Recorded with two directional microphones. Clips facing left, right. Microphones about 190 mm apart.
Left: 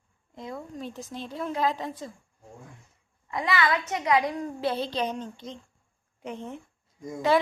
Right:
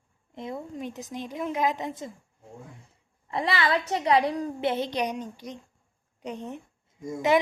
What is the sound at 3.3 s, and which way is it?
A woman's voice, 30° right (ahead or behind).